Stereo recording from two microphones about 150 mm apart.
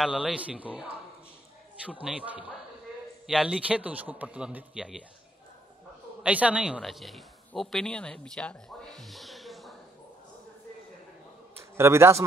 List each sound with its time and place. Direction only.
0.0 s a man's voice: 5° right (ahead or behind)
6.2 s a man's voice: 10° right (ahead or behind)
11.5 s a man's voice: 15° right (ahead or behind)